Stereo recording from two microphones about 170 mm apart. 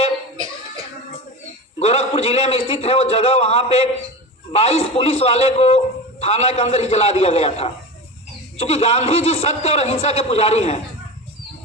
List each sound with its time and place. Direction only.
1.8 s a man's voice: 35° left (ahead or behind)